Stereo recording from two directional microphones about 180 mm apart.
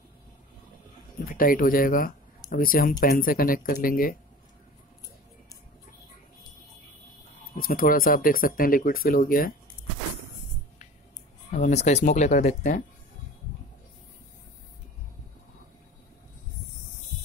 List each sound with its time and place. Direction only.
1.3 s speech: 50° left (ahead or behind)
7.5 s speech: 55° left (ahead or behind)
11.5 s speech: 40° left (ahead or behind)